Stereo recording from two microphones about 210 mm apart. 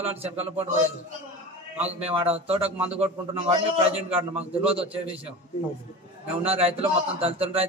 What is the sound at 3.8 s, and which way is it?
A man's voice, 30° right (ahead or behind).